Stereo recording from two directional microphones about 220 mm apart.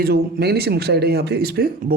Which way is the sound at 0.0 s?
45° right (ahead or behind).